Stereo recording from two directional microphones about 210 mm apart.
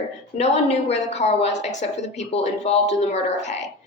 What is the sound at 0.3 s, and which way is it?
A woman's voice, 30° left (ahead or behind).